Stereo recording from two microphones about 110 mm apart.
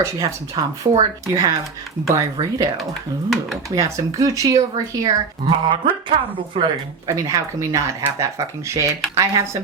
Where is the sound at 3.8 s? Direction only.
30° right (ahead or behind).